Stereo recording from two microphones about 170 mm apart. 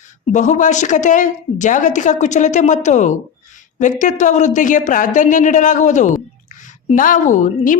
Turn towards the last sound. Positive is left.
turn(degrees=50)  # may be behind; listen again after turning